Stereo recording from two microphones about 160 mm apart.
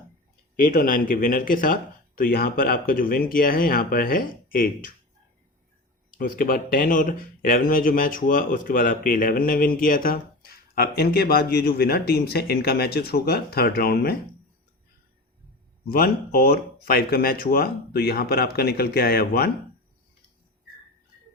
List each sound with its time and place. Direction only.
0.6 s speech: 60° left (ahead or behind)
6.1 s speech: 65° left (ahead or behind)
15.9 s speech: 65° left (ahead or behind)